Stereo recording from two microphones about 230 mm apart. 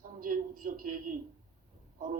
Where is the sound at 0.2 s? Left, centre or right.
Right.